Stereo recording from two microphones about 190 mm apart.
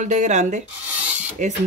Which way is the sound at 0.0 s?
40° right (ahead or behind).